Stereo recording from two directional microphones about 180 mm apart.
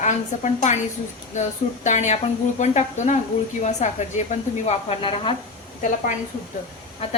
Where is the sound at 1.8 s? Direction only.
40° left (ahead or behind).